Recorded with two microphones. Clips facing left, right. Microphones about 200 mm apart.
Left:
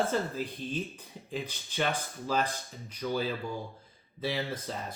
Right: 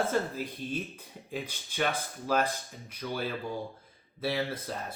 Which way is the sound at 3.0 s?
Centre (ahead or behind).